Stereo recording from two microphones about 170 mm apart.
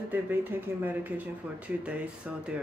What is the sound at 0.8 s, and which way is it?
Speech, 10° right (ahead or behind).